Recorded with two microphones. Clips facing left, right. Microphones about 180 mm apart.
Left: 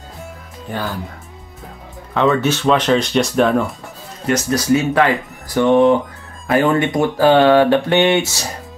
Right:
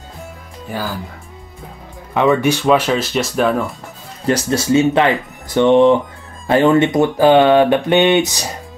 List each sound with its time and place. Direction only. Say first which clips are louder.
0.7 s speech: even; 5° right (ahead or behind)
2.4 s speech: right 2 dB; 10° right (ahead or behind)
4.3 s speech: right 1 dB; 30° right (ahead or behind)